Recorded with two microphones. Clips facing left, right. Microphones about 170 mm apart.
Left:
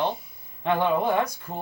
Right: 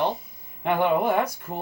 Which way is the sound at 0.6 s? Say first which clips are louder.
Right 1 dB; 10° right (ahead or behind).